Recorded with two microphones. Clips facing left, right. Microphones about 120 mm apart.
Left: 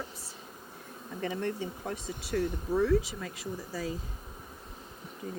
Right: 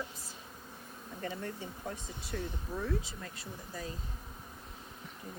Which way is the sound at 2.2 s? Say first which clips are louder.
Left 9 dB; 80° left.